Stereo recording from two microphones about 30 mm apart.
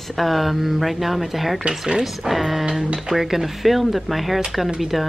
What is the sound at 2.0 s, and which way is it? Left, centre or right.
A woman's voice, centre.